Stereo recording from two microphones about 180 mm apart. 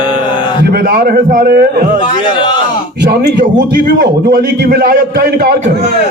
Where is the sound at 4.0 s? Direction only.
60° right (ahead or behind).